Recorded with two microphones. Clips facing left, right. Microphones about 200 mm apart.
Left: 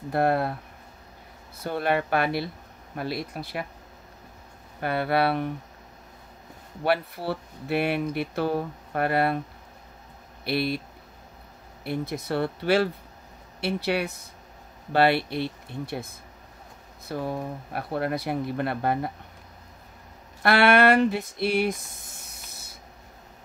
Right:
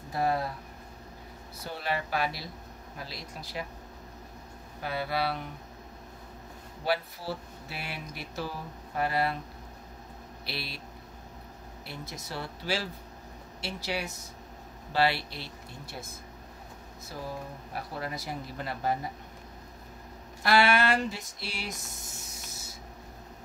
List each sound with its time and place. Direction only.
0.1 s speech: 60° left (ahead or behind)
1.6 s speech: 55° left (ahead or behind)
4.7 s speech: 60° left (ahead or behind)
6.8 s speech: 60° left (ahead or behind)
10.4 s speech: 55° left (ahead or behind)
11.8 s speech: 55° left (ahead or behind)
17.1 s speech: 60° left (ahead or behind)
20.4 s a sound: 60° left (ahead or behind)